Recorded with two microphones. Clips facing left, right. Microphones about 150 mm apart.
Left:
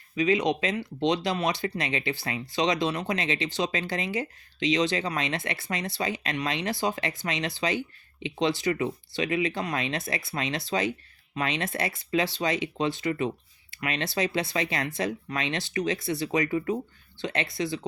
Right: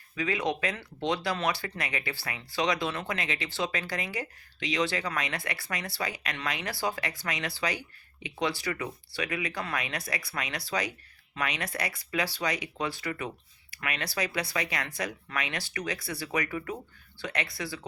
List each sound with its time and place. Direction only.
0.2 s speech: 20° left (ahead or behind)